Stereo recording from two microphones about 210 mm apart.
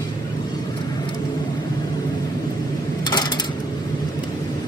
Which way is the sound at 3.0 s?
20° left (ahead or behind).